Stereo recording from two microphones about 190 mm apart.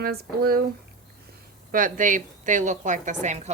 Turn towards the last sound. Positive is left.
turn(degrees=-40)  # may be behind; listen again after turning